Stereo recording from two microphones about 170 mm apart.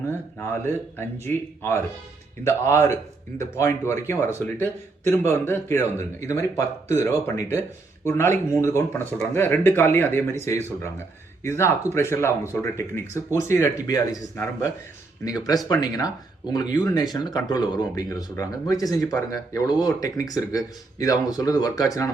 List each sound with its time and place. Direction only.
0.5 s speech: 15° left (ahead or behind)